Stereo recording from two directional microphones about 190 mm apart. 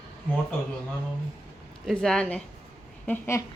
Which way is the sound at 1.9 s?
5° left (ahead or behind).